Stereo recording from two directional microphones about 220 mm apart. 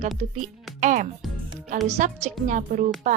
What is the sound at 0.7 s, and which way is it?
Music, 35° right (ahead or behind).